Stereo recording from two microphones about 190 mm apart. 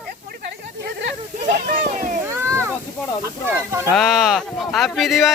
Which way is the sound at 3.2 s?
15° right (ahead or behind).